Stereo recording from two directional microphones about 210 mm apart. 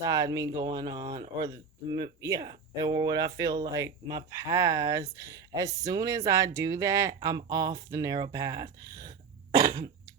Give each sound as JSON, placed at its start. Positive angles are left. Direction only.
{"t": 0.0, "sound": "speech", "side_deg": -15}